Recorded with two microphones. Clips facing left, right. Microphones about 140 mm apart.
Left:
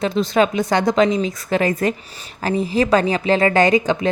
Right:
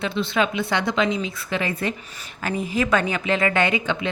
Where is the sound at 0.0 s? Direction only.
40° left (ahead or behind).